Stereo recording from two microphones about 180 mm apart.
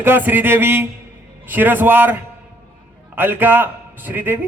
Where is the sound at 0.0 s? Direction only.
10° right (ahead or behind).